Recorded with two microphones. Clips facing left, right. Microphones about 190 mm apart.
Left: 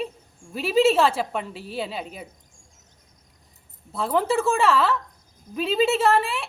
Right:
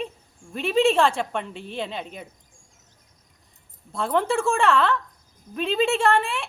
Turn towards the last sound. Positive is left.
turn(degrees=0)  # may be behind; listen again after turning